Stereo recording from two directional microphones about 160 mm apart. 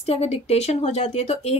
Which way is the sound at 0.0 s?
40° left (ahead or behind).